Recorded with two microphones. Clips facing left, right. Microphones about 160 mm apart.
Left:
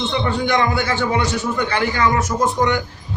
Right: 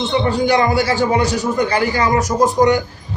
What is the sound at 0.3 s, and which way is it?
A man's voice, 35° right (ahead or behind).